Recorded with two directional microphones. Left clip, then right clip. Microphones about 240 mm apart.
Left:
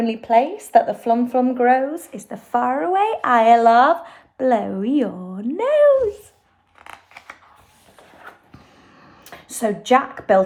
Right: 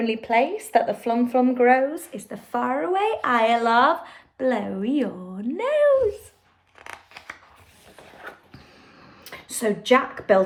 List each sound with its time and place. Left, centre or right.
0.0 s speech: centre
9.3 s a woman's voice: centre